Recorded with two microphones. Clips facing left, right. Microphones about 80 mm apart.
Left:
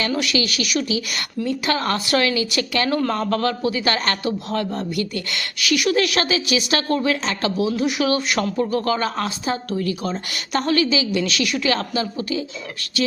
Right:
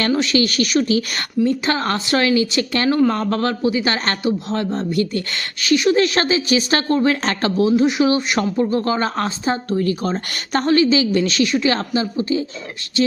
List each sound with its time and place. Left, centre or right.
0.1 s a woman's voice: right
7.7 s a man's voice: right